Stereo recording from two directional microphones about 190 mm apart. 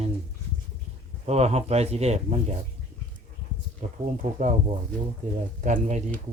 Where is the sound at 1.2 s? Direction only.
35° right (ahead or behind).